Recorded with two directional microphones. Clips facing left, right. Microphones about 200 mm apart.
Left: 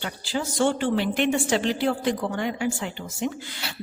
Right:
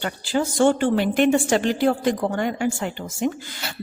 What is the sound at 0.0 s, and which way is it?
A woman's voice, 50° right (ahead or behind).